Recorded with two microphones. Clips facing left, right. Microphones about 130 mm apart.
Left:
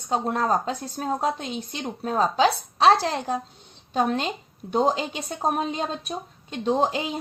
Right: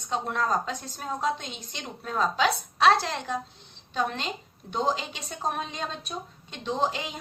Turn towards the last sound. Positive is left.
turn(degrees=40)  # may be behind; listen again after turning